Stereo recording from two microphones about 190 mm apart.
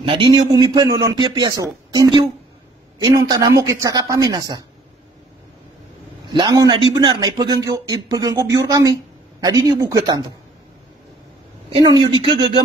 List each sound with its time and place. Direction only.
0.0 s a man's voice: 25° right (ahead or behind)
6.2 s a man's voice: 25° right (ahead or behind)
11.7 s a man's voice: 25° right (ahead or behind)